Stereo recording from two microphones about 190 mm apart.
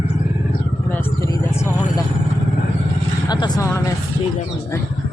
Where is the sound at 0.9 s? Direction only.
10° left (ahead or behind).